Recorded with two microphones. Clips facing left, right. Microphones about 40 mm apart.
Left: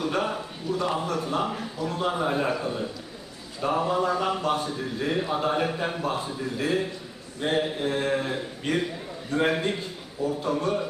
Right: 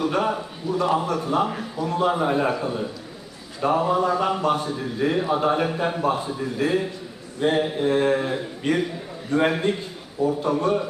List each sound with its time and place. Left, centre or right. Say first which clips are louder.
0.0 s speech: right 4 dB; centre
10.2 s a man's voice: right 5 dB; right
10.5 s speech: right 4 dB; centre